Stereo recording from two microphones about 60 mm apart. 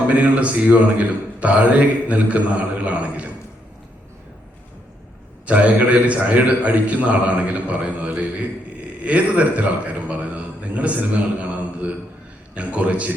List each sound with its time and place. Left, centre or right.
0.1 s a man's voice: right
5.5 s a man's voice: right
11.3 s mantra: right
12.5 s a man's voice: right